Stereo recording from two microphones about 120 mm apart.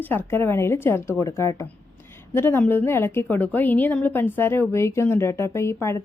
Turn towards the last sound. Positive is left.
turn(degrees=25)  # may be behind; listen again after turning